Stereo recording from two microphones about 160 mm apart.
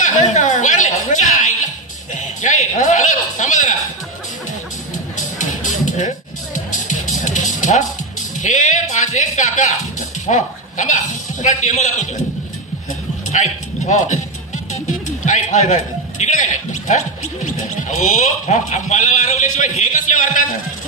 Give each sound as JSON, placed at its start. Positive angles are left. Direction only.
{"t": 0.0, "sound": "a sound", "side_deg": 50}
{"t": 2.1, "sound": "a man's voice", "side_deg": 50}
{"t": 5.1, "sound": "music", "side_deg": 50}
{"t": 8.4, "sound": "speech", "side_deg": 50}
{"t": 13.3, "sound": "a man's voice", "side_deg": 50}
{"t": 14.7, "sound": "music", "side_deg": 50}
{"t": 17.6, "sound": "speech", "side_deg": 50}